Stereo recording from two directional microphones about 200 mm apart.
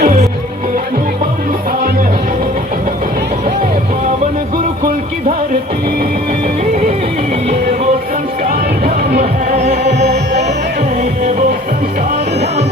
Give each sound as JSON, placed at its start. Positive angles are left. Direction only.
{"t": 0.0, "sound": "music", "side_deg": -40}
{"t": 9.6, "sound": "music", "side_deg": -35}